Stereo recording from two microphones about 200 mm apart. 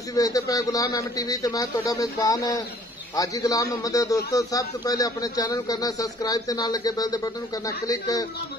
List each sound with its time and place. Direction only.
0.1 s a man's voice: 20° left (ahead or behind)